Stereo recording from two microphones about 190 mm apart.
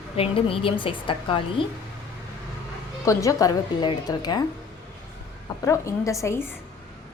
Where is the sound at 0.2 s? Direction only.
30° left (ahead or behind).